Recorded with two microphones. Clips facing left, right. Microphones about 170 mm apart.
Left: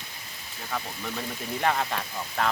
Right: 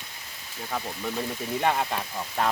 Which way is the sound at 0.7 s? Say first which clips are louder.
Right 2 dB; 10° right (ahead or behind).